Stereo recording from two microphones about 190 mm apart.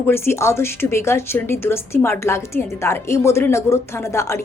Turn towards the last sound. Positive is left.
turn(degrees=15)  # may be behind; listen again after turning